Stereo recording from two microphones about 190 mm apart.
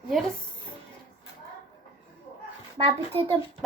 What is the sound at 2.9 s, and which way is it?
Speech, 25° right (ahead or behind).